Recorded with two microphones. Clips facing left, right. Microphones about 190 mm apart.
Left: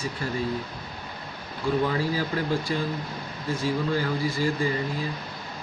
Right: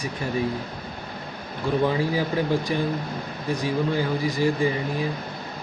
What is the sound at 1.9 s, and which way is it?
Speech, 15° right (ahead or behind).